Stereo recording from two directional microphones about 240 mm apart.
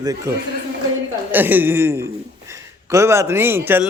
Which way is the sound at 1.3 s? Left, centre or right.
Centre.